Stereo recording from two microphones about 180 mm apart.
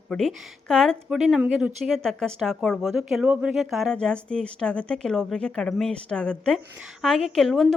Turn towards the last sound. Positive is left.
turn(degrees=0)  # may be behind; listen again after turning